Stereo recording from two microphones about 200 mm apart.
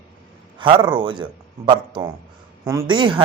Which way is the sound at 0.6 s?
25° right (ahead or behind).